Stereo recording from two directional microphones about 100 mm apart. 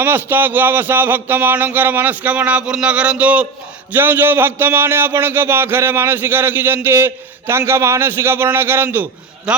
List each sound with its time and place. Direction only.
0.0 s a man's voice: 20° right (ahead or behind)
9.5 s speech: 10° right (ahead or behind)